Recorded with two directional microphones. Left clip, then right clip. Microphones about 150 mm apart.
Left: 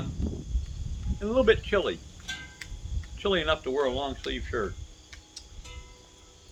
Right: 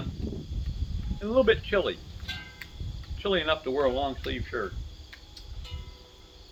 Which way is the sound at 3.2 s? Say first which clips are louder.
Even; 25° left (ahead or behind).